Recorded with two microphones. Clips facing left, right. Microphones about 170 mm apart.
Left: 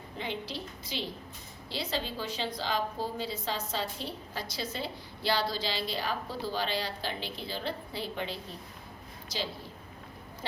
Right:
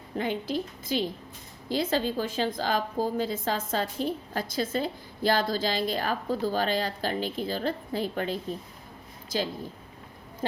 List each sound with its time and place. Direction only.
0.2 s a woman's voice: 50° right (ahead or behind)